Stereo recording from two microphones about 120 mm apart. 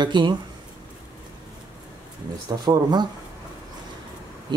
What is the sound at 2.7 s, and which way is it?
Speech, 35° right (ahead or behind).